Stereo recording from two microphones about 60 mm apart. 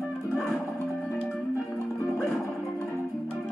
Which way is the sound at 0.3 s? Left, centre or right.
Centre.